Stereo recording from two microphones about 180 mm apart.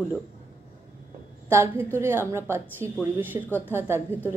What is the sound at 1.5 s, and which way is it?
Speech, 15° right (ahead or behind).